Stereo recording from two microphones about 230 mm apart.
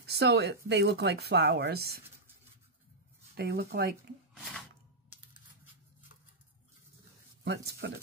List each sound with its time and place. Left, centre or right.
0.0 s speech: right
3.3 s speech: right
7.4 s speech: right